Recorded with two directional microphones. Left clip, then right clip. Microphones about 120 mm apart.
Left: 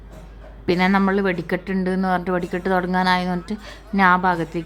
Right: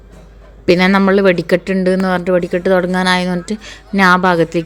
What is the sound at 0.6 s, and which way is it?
A woman's voice, 25° right (ahead or behind).